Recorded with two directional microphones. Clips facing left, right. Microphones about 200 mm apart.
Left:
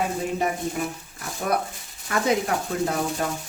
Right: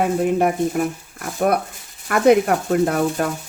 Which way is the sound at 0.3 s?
55° right (ahead or behind).